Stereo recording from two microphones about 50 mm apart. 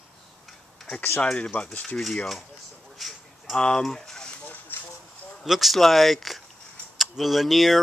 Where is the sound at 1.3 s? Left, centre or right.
Left.